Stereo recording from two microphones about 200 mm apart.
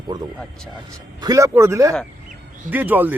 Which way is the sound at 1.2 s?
15° right (ahead or behind).